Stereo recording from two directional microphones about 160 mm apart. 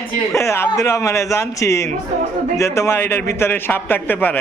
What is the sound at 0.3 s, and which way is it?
A man's voice, 15° left (ahead or behind).